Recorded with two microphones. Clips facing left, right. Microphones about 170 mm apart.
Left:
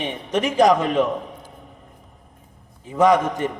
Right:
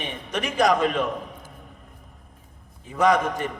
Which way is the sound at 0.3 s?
25° left (ahead or behind).